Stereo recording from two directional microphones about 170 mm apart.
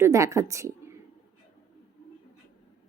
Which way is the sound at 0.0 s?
15° right (ahead or behind).